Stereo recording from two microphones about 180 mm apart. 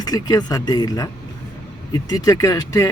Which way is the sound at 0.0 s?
20° left (ahead or behind).